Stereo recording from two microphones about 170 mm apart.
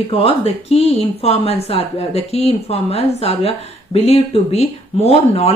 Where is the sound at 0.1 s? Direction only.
35° left (ahead or behind).